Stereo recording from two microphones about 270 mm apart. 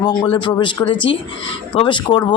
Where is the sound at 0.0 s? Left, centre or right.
Centre.